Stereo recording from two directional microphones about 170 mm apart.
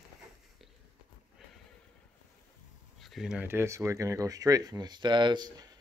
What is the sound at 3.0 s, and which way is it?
Speech, centre (ahead or behind).